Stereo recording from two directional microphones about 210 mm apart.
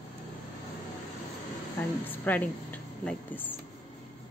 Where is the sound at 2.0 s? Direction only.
10° left (ahead or behind).